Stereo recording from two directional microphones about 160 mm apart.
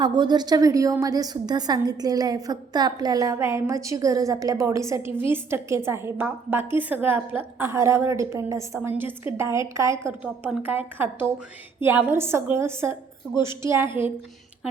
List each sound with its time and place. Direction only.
0.0 s a woman's voice: 30° right (ahead or behind)